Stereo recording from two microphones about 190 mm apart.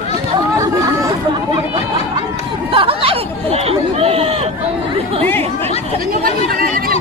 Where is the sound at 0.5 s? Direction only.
15° right (ahead or behind).